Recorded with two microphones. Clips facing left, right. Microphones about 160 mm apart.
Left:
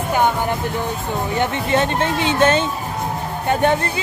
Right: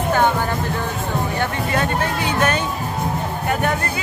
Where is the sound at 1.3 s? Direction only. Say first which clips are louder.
Left 6 dB; 25° left (ahead or behind).